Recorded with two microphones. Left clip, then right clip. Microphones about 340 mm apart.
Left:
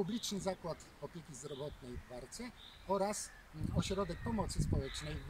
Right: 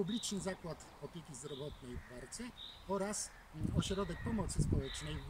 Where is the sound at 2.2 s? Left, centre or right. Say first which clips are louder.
Right 1 dB; centre.